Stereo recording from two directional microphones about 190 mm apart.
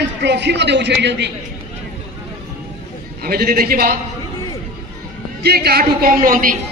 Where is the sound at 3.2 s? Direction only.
50° right (ahead or behind).